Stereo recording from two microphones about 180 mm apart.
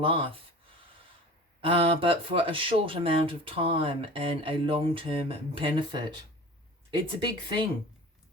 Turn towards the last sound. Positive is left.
turn(degrees=-25)  # may be behind; listen again after turning